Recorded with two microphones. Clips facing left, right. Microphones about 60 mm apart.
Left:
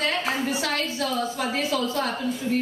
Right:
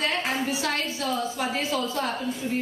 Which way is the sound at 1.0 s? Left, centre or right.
Right.